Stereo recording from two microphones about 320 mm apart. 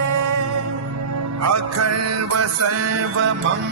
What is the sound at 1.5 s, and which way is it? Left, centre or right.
Music, right.